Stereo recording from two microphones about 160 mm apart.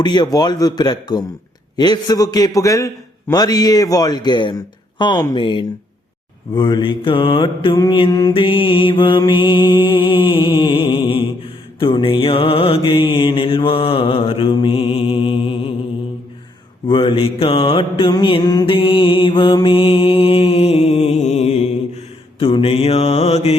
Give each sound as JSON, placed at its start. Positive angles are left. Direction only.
{"t": 0.0, "sound": "a man's voice", "side_deg": 25}
{"t": 6.5, "sound": "mantra", "side_deg": 30}
{"t": 16.9, "sound": "mantra", "side_deg": 35}